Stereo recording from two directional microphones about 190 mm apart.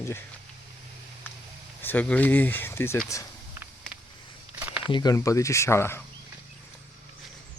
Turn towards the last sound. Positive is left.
turn(degrees=15)  # may be behind; listen again after turning